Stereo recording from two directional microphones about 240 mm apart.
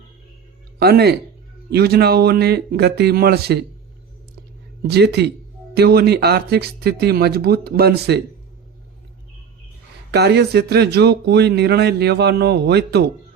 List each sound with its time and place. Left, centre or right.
0.8 s speech: right
4.9 s speech: right
10.1 s speech: right